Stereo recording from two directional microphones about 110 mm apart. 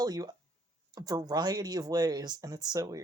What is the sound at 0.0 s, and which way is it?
Speech, 35° right (ahead or behind).